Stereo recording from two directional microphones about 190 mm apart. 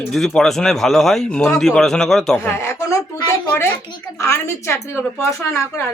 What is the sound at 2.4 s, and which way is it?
Speech, 15° left (ahead or behind).